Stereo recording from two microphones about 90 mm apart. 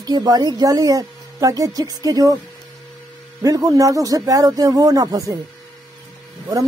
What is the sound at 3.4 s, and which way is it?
Speech, 40° right (ahead or behind).